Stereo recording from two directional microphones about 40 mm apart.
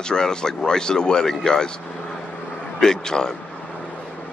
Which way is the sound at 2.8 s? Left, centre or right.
Centre.